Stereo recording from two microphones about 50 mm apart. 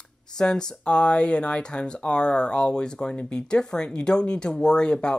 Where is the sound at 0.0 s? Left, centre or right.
Centre.